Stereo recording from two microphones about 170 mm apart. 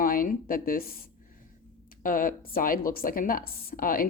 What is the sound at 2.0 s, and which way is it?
A woman's voice, 55° left (ahead or behind).